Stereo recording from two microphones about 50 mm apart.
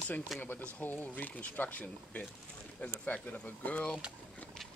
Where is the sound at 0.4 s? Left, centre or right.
Left.